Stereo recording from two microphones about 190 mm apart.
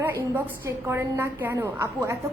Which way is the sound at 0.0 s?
10° right (ahead or behind).